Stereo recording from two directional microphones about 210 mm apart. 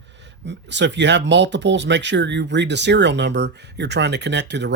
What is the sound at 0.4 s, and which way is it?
Speech, 55° right (ahead or behind).